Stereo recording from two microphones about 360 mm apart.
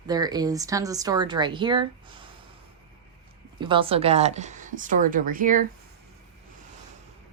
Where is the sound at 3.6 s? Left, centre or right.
Centre.